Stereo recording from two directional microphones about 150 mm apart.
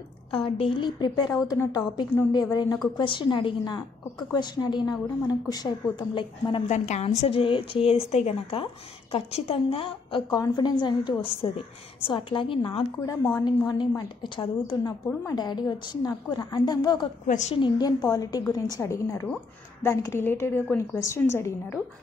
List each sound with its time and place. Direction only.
0.3 s a woman's voice: 35° left (ahead or behind)
6.7 s a woman's voice: 50° left (ahead or behind); by 17.1 s 30° left (ahead or behind)
17.3 s a woman's voice: 50° left (ahead or behind)
17.6 s a woman's voice: 30° left (ahead or behind)